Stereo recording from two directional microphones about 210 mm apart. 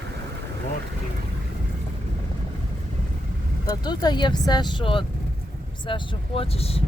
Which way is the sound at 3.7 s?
20° left (ahead or behind).